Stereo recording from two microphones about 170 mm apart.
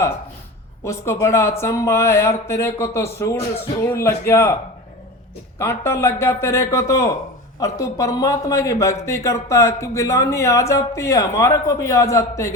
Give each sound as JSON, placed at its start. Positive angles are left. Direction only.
{"t": 0.9, "sound": "speech", "side_deg": 15}
{"t": 5.5, "sound": "a man's voice", "side_deg": 15}